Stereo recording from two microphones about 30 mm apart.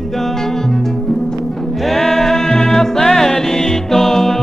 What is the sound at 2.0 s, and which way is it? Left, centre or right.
Music, centre.